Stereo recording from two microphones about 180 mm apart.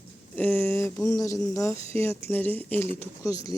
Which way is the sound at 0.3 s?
10° left (ahead or behind).